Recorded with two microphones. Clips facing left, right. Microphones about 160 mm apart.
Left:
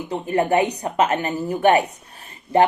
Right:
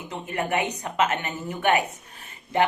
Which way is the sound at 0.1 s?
35° left (ahead or behind).